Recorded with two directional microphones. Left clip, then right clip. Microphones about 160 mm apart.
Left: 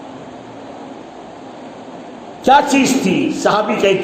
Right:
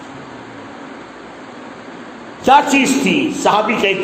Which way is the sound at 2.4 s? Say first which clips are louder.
Even; 30° left (ahead or behind).